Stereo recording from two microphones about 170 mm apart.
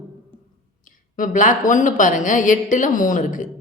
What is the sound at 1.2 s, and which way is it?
Speech, 50° left (ahead or behind).